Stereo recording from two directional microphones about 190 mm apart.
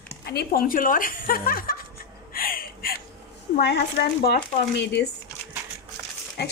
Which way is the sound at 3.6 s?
60° left (ahead or behind).